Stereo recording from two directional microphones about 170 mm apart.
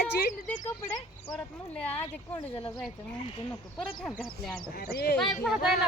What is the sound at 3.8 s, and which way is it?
Speech, centre (ahead or behind).